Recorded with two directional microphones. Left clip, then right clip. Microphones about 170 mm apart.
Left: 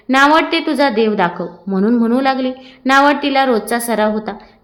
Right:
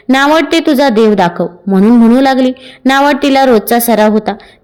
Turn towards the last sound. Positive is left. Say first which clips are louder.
# right 7 dB
turn(degrees=-40)  # may be behind; listen again after turning